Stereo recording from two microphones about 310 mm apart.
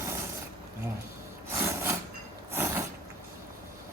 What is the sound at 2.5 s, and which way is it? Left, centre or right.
Mechanisms, centre.